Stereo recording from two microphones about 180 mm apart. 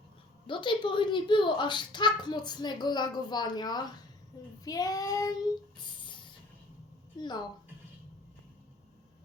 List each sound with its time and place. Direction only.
0.4 s a child's voice: 25° left (ahead or behind)
7.2 s a child's voice: 25° left (ahead or behind)